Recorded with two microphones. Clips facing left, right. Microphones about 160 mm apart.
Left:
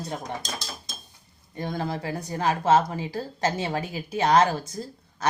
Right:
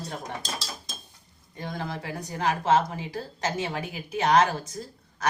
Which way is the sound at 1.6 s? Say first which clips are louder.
Left 4 dB; 35° left (ahead or behind).